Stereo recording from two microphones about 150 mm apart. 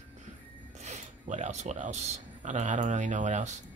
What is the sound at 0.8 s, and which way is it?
Speech, 50° right (ahead or behind).